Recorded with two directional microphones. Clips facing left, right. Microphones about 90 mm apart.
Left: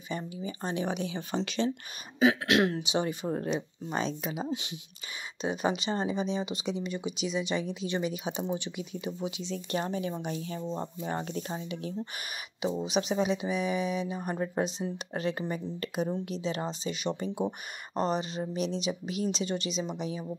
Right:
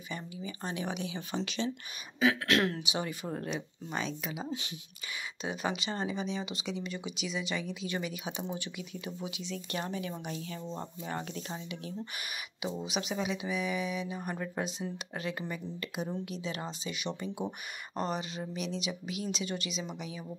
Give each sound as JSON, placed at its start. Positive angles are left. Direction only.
{"t": 0.1, "sound": "speech", "side_deg": 30}
{"t": 2.1, "sound": "speech", "side_deg": 20}
{"t": 3.9, "sound": "speech", "side_deg": 30}
{"t": 4.5, "sound": "speech", "side_deg": 20}